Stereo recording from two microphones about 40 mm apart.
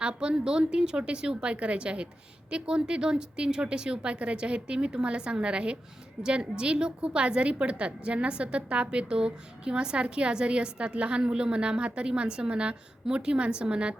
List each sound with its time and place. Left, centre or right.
0.0 s a woman's voice: right